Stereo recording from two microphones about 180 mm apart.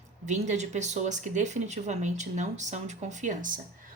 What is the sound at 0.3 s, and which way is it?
Speech, 40° right (ahead or behind).